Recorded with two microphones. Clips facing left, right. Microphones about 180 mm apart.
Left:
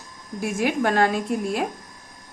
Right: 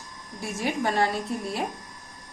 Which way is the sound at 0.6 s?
75° left (ahead or behind).